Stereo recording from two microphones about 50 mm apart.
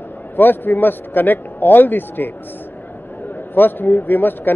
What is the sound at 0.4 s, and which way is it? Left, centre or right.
Speech, left.